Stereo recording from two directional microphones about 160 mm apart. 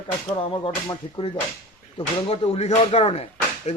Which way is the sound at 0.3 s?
30° left (ahead or behind).